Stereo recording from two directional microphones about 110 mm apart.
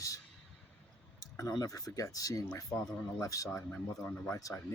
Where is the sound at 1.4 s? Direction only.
30° left (ahead or behind).